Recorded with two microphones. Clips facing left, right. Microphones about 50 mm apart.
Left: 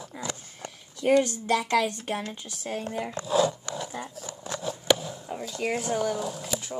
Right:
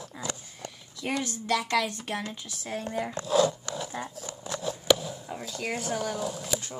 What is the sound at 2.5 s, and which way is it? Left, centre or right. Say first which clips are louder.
Speech: left 1 dB; left.